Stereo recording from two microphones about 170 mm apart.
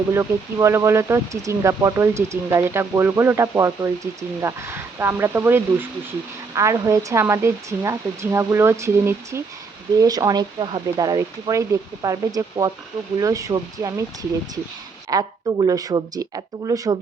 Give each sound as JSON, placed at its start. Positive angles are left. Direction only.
{"t": 0.1, "sound": "speech", "side_deg": -15}